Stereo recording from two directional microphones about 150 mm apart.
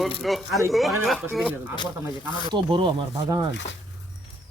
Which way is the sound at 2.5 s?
35° right (ahead or behind).